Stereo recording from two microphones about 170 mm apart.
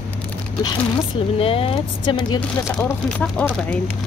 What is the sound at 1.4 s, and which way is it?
Speech, 35° left (ahead or behind).